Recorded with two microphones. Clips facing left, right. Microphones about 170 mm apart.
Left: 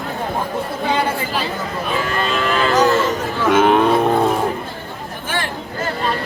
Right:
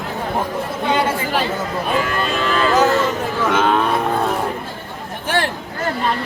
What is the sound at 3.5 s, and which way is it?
Speech, 20° left (ahead or behind).